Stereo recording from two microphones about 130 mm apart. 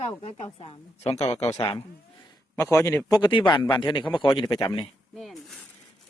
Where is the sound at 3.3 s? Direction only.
40° left (ahead or behind).